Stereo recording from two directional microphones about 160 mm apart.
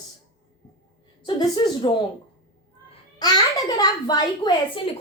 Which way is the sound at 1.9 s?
30° left (ahead or behind).